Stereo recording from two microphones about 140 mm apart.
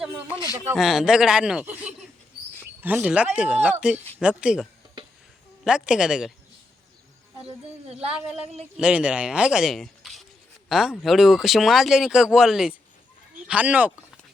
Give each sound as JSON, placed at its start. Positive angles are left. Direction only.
{"t": 0.5, "sound": "speech", "side_deg": -5}
{"t": 7.4, "sound": "a child's voice", "side_deg": -45}
{"t": 8.1, "sound": "speech", "side_deg": -5}